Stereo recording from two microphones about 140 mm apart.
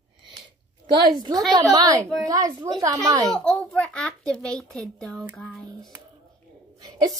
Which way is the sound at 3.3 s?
5° left (ahead or behind).